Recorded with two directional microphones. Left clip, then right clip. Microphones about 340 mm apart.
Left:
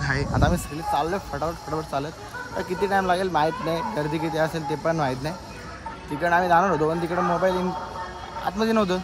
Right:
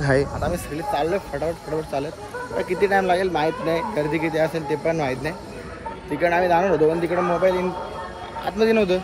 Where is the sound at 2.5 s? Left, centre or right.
Centre.